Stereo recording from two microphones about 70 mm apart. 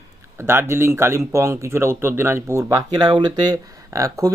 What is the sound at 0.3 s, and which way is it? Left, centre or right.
Speech, right.